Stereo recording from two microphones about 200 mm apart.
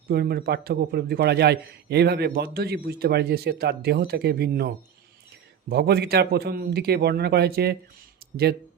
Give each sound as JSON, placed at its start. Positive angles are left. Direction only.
{"t": 0.1, "sound": "a man's voice", "side_deg": -50}